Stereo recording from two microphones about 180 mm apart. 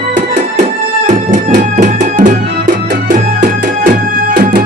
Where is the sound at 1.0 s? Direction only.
45° right (ahead or behind).